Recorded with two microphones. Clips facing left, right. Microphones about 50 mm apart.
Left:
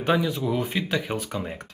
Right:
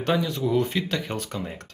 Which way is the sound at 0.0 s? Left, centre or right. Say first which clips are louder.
Left 1 dB; centre.